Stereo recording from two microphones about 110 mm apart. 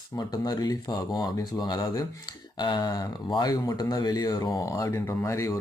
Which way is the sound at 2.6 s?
45° left (ahead or behind).